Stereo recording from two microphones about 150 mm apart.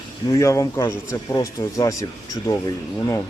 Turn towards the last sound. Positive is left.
turn(degrees=25)  # may be behind; listen again after turning